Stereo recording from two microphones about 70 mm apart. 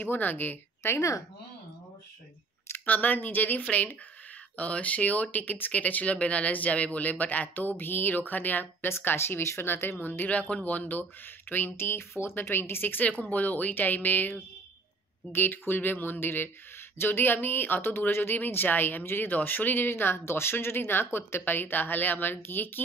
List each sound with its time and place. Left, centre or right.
0.0 s speech: left
0.9 s speech: left
2.7 s speech: left
15.3 s speech: left